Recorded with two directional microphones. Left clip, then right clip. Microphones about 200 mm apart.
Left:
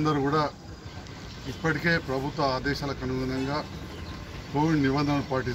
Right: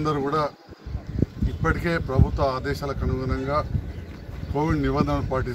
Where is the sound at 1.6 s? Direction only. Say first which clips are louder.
Right 1 dB; 10° right (ahead or behind).